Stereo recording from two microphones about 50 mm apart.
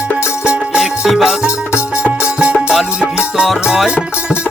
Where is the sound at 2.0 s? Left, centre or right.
Right.